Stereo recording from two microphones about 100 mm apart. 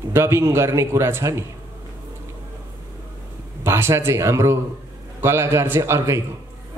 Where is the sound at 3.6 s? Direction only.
25° right (ahead or behind).